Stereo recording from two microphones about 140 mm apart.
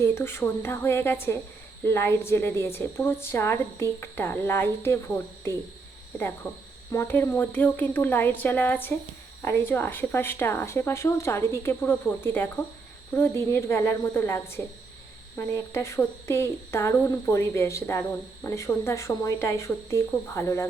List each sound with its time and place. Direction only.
0.0 s speech: 20° left (ahead or behind)
13.5 s speech: 15° left (ahead or behind)